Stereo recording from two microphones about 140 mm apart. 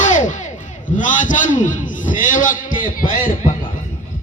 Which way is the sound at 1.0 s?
65° left (ahead or behind).